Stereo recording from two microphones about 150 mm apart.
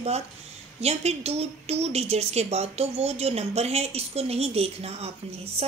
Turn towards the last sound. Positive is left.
turn(degrees=-45)  # may be behind; listen again after turning